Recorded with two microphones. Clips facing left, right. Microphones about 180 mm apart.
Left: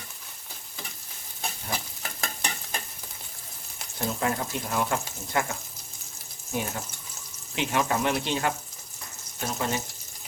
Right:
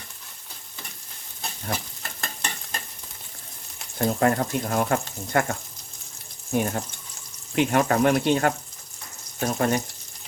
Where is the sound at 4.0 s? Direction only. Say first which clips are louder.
Right 7 dB; 55° right (ahead or behind).